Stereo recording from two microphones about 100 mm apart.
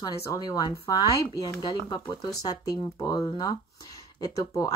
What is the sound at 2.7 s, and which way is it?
A woman's voice, 40° left (ahead or behind).